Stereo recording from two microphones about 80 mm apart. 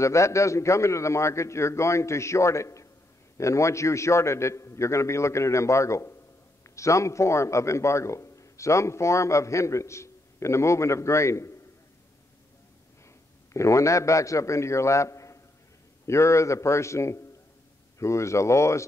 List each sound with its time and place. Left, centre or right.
0.0 s a man's voice: left
13.5 s a man's voice: left